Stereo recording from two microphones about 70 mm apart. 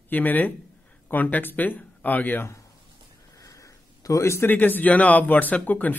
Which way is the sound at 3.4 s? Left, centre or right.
Left.